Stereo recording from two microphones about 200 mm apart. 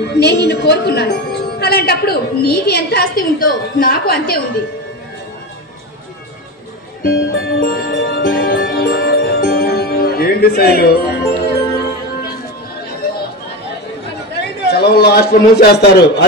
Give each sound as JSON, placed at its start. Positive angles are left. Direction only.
{"t": 0.1, "sound": "a woman's voice", "side_deg": 55}
{"t": 7.0, "sound": "music", "side_deg": 50}
{"t": 13.0, "sound": "chatter", "side_deg": 50}
{"t": 14.4, "sound": "a man's voice", "side_deg": 55}